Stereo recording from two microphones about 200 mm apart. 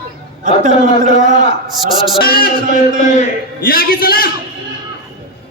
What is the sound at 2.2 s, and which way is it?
A man's voice, 50° left (ahead or behind).